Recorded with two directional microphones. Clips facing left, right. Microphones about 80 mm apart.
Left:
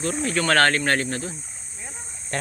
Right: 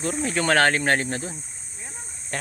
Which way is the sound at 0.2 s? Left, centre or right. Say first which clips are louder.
Even; centre.